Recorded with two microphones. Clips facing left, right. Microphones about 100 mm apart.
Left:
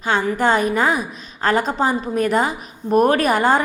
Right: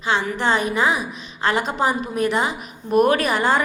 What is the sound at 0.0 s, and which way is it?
A woman's voice, 45° left (ahead or behind).